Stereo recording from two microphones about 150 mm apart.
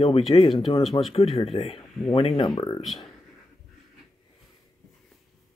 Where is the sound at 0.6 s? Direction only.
35° left (ahead or behind).